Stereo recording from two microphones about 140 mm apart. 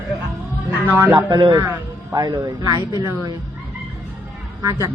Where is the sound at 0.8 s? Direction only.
15° right (ahead or behind).